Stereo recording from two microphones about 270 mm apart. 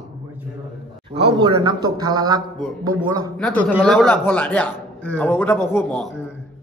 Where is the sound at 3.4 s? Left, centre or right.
Centre.